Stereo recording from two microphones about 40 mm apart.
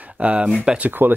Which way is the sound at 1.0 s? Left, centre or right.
Right.